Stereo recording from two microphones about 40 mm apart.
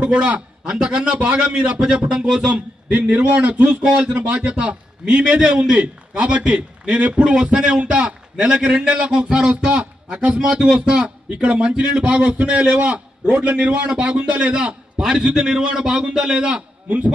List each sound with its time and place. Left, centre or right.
0.0 s a man's voice: right
2.9 s a man's voice: right